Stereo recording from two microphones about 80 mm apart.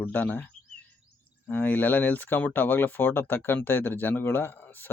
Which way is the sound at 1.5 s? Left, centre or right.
Left.